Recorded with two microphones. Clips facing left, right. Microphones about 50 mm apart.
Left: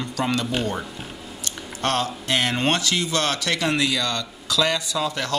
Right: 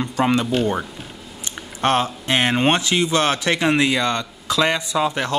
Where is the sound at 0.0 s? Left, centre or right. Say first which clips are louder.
Right 5 dB; right.